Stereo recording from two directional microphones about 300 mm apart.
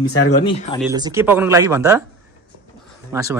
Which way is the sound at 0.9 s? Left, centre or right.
Centre.